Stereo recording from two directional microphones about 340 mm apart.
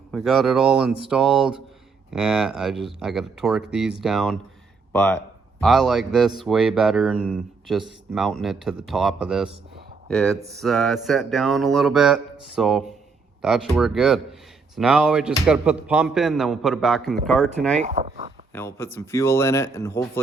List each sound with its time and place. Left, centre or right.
0.1 s speech: centre
17.7 s speech: right
18.5 s speech: centre